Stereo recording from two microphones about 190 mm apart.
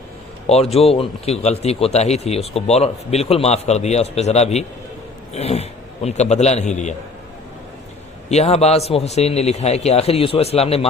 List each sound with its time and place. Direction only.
0.4 s a man's voice: 30° left (ahead or behind)
8.3 s speech: 35° left (ahead or behind)